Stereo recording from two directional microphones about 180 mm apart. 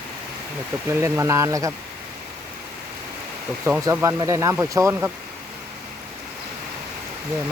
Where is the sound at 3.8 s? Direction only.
15° right (ahead or behind).